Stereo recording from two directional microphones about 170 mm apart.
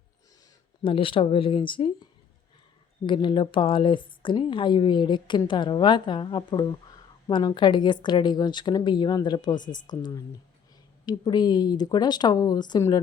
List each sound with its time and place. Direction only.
0.8 s speech: 30° left (ahead or behind)
3.1 s speech: 30° left (ahead or behind)